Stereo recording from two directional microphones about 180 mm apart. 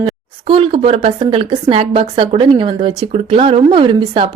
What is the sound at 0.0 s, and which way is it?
Speech, 30° right (ahead or behind).